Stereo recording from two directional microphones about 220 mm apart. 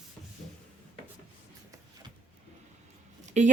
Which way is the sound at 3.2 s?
30° right (ahead or behind).